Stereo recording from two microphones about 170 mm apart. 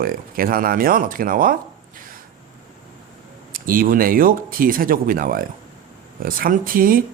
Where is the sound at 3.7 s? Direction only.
55° right (ahead or behind).